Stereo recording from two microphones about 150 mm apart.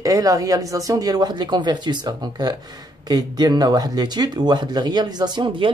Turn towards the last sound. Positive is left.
turn(degrees=-30)  # may be behind; listen again after turning